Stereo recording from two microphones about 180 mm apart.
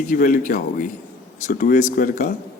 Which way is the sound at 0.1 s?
50° left (ahead or behind).